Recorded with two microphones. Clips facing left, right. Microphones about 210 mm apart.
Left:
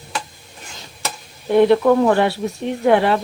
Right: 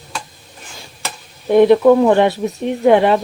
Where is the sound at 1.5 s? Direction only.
15° right (ahead or behind).